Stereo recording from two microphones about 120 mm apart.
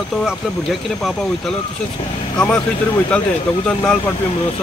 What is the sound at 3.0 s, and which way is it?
Speech, 10° left (ahead or behind).